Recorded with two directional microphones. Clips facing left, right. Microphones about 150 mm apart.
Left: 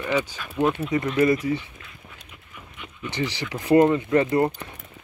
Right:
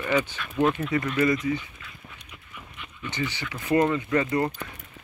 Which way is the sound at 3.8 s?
25° left (ahead or behind).